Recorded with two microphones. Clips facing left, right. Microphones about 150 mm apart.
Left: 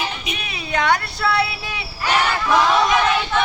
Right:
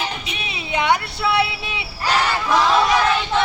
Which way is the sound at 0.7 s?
20° right (ahead or behind).